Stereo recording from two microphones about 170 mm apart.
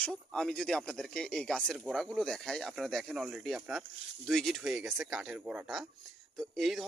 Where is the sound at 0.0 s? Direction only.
5° left (ahead or behind).